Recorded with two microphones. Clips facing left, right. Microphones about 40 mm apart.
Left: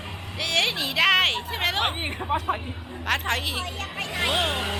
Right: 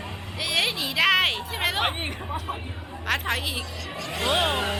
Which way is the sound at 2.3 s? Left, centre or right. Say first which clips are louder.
Left 10 dB; left.